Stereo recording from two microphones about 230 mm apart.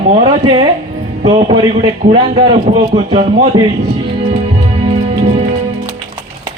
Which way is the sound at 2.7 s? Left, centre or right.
Right.